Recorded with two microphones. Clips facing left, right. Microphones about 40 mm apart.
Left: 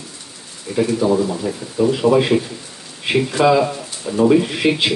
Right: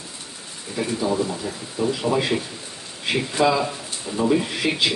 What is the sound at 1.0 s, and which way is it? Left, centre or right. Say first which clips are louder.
Speech: left 6 dB; left.